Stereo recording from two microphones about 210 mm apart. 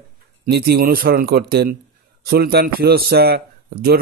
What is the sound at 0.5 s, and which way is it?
A man's voice, 50° right (ahead or behind).